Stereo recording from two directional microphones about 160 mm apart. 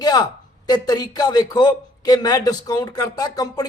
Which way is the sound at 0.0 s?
25° left (ahead or behind).